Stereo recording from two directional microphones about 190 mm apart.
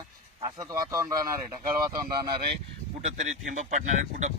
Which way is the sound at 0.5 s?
20° right (ahead or behind).